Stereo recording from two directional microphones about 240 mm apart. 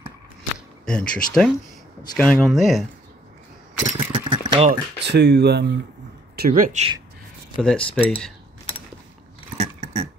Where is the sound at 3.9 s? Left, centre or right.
Centre.